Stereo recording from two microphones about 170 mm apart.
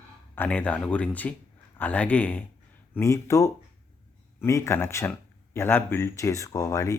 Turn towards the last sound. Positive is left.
turn(degrees=20)  # may be behind; listen again after turning